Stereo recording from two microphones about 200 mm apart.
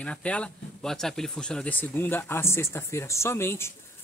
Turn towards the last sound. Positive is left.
turn(degrees=10)  # may be behind; listen again after turning